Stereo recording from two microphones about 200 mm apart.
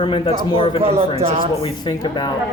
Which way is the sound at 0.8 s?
30° right (ahead or behind).